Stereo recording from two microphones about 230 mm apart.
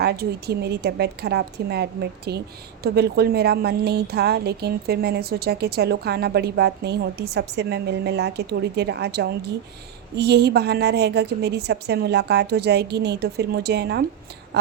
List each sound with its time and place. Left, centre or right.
0.0 s a woman's voice: right